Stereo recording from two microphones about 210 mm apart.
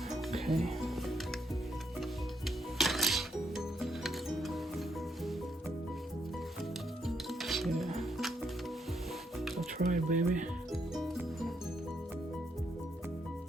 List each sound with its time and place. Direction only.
0.1 s music: centre (ahead or behind)
2.7 s music: centre (ahead or behind)
7.3 s music: centre (ahead or behind)
9.7 s music: 40° right (ahead or behind)
10.7 s music: centre (ahead or behind)